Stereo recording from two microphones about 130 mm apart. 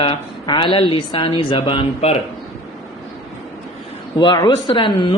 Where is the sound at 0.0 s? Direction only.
35° left (ahead or behind).